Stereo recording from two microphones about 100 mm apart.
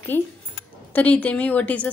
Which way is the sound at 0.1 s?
20° left (ahead or behind).